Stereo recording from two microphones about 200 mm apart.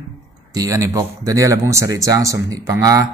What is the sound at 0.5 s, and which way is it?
Speech, 15° right (ahead or behind).